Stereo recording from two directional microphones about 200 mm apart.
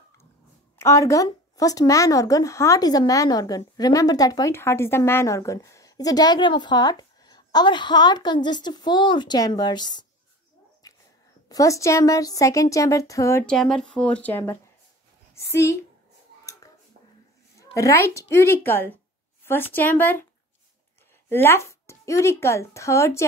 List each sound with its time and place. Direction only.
0.7 s speech: 15° left (ahead or behind)
10.8 s dog: 20° left (ahead or behind)
11.4 s a woman's voice: 15° left (ahead or behind)
17.6 s a woman's voice: 15° left (ahead or behind)
21.3 s a woman's voice: 10° left (ahead or behind)